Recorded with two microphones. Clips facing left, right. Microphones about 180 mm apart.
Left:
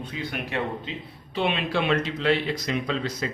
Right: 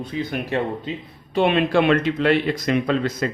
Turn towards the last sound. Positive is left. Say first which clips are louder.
# right 6 dB
turn(degrees=-55)  # may be behind; listen again after turning